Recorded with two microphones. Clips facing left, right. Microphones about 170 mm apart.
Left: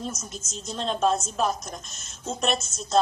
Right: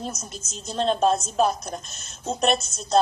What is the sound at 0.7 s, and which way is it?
A woman's voice, 35° right (ahead or behind).